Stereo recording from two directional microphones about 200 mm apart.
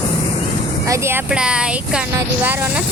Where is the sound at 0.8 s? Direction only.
15° right (ahead or behind).